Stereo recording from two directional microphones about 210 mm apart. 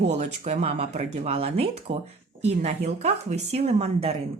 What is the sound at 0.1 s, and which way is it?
Speech, 30° right (ahead or behind).